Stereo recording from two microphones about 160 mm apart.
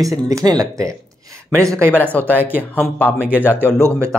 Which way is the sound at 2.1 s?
10° left (ahead or behind).